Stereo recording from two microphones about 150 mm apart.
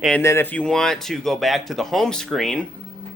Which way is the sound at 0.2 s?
15° left (ahead or behind).